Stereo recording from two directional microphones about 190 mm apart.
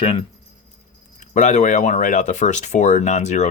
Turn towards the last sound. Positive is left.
turn(degrees=35)  # may be behind; listen again after turning